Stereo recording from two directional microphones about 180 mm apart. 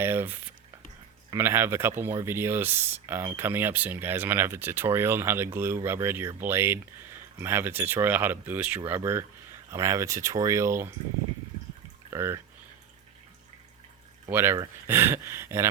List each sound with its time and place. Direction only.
0.0 s speech: 10° right (ahead or behind)
12.1 s speech: 15° right (ahead or behind)
14.3 s speech: 10° right (ahead or behind)